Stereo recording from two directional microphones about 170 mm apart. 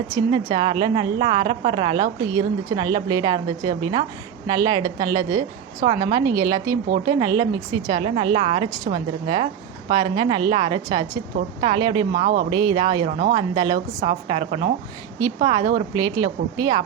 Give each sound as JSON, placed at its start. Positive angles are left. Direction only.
{"t": 0.1, "sound": "a woman's voice", "side_deg": -25}